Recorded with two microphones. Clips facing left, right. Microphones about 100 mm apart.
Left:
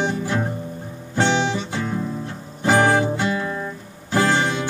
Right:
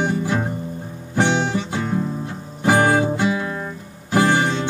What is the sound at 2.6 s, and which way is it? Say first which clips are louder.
Music: right 1 dB; 10° right (ahead or behind).